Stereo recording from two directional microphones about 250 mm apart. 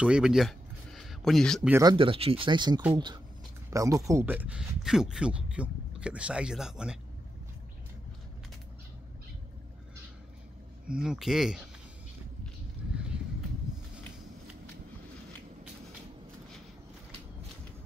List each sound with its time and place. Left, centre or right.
0.0 s speech: centre
1.7 s speech: centre
10.9 s speech: centre
12.9 s a sound: centre